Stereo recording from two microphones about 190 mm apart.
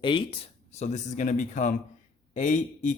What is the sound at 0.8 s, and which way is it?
Speech, 40° left (ahead or behind).